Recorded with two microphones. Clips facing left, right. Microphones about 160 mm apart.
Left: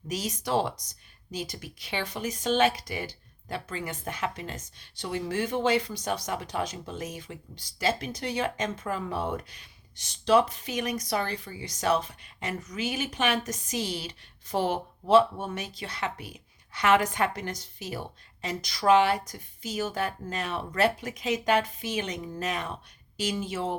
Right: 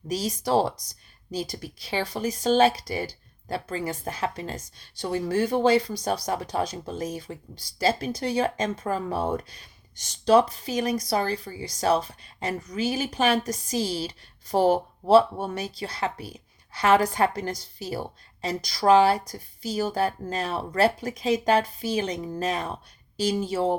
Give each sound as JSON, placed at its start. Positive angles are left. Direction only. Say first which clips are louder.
{"t": 0.1, "sound": "speech", "louder": "right 4 dB", "side_deg": -35}